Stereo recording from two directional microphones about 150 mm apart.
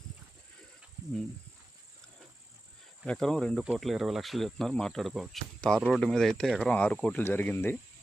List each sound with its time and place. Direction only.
3.1 s cricket: 5° left (ahead or behind)
5.8 s speech: centre (ahead or behind)